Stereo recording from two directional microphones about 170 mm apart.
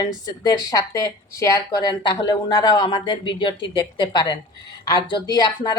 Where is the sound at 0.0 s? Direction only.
20° left (ahead or behind).